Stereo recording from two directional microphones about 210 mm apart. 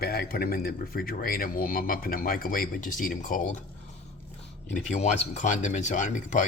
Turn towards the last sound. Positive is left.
turn(degrees=35)  # may be behind; listen again after turning